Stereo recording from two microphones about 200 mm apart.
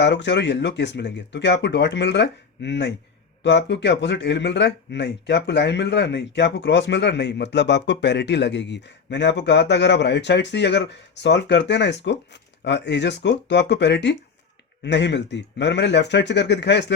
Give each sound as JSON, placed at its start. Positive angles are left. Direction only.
{"t": 0.0, "sound": "speech", "side_deg": 60}